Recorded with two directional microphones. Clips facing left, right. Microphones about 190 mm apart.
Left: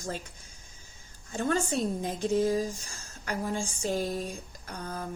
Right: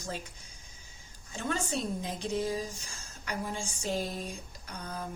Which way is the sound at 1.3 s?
50° left (ahead or behind).